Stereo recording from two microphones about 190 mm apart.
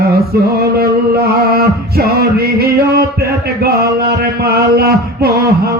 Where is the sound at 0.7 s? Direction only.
55° right (ahead or behind).